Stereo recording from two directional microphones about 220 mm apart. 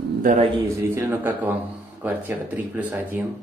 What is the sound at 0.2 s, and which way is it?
Speech, 35° right (ahead or behind).